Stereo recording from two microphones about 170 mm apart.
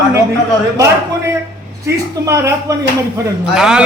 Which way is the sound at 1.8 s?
15° right (ahead or behind).